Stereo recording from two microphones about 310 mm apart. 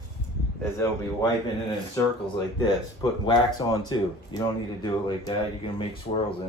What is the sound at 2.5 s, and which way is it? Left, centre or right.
Speech, centre.